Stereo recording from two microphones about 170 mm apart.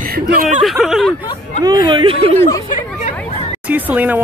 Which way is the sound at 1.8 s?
30° right (ahead or behind).